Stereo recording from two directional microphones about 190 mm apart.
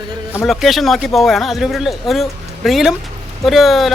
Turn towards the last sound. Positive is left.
turn(degrees=0)  # may be behind; listen again after turning